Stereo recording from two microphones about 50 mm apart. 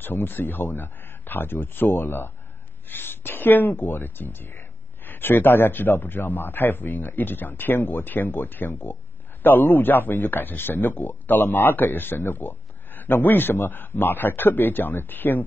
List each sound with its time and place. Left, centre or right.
0.0 s speech: left